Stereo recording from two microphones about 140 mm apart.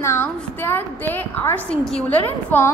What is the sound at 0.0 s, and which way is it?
A woman's voice, 15° left (ahead or behind).